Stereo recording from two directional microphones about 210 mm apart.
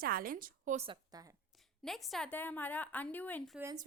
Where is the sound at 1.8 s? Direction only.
Centre (ahead or behind).